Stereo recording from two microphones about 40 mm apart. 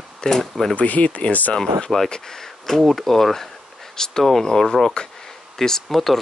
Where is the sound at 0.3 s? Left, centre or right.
Centre.